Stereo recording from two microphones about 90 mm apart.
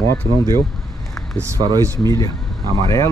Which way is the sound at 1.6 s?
75° right (ahead or behind).